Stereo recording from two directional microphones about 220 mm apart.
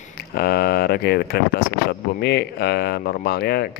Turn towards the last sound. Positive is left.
turn(degrees=45)  # may be behind; listen again after turning